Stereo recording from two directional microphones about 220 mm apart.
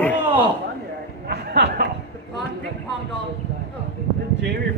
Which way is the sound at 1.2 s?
45° right (ahead or behind).